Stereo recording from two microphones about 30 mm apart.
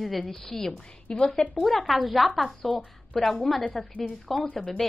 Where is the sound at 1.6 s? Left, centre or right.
Centre.